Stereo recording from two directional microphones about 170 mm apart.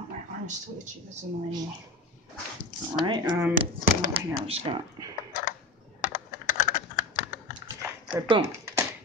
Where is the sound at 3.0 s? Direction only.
25° right (ahead or behind).